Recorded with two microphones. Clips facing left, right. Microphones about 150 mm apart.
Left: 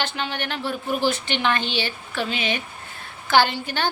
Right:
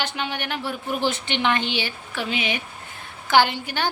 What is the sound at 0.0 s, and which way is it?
Speech, 15° right (ahead or behind).